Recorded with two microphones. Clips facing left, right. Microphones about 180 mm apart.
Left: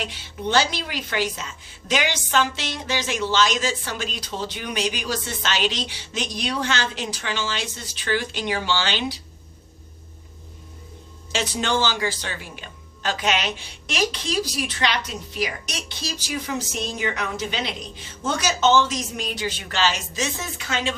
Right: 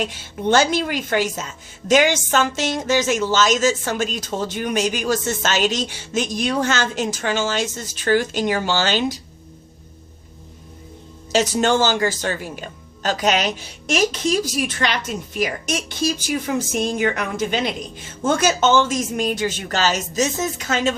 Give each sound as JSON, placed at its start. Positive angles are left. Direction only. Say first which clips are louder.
{"t": 0.0, "sound": "speech", "louder": "right 6 dB", "side_deg": -45}
{"t": 11.3, "sound": "speech", "louder": "right 7 dB", "side_deg": -40}